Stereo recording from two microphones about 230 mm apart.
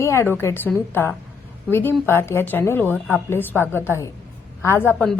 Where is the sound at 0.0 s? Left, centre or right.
Centre.